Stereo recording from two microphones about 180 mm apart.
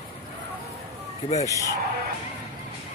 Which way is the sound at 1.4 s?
20° left (ahead or behind).